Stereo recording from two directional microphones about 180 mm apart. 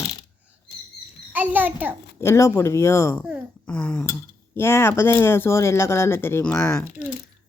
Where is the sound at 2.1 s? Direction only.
15° left (ahead or behind).